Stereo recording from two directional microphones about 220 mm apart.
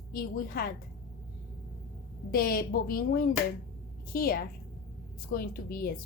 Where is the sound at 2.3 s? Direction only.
40° left (ahead or behind).